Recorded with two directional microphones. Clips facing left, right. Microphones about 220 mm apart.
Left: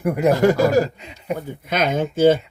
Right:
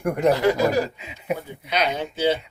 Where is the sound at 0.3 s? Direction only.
45° left (ahead or behind).